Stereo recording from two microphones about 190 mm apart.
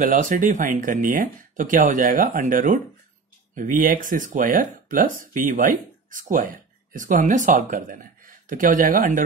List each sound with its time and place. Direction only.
0.0 s speech: 45° right (ahead or behind)